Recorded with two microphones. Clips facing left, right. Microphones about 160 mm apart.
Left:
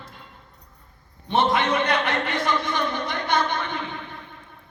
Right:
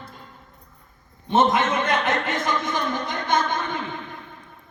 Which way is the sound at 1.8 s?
45° right (ahead or behind).